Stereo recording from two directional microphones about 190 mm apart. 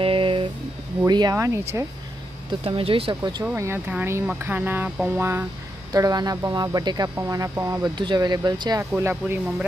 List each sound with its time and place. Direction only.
0.0 s a sound: 30° right (ahead or behind)
1.0 s speech: 20° right (ahead or behind)
2.6 s speech: 30° right (ahead or behind)
8.9 s speech: 10° right (ahead or behind)